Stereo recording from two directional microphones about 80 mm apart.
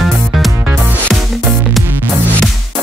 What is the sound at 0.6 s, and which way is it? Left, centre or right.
Music, right.